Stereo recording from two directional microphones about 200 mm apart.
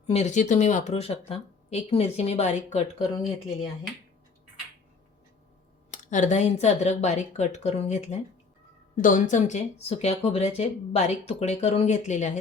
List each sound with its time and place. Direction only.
0.1 s speech: 35° left (ahead or behind)
5.9 s speech: 40° left (ahead or behind)